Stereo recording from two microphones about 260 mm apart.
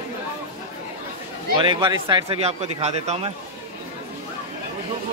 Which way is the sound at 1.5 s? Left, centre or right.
Centre.